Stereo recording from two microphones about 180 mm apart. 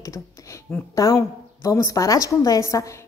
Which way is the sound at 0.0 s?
20° left (ahead or behind).